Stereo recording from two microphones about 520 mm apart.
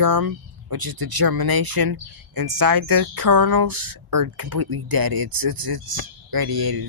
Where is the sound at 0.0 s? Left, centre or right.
Right.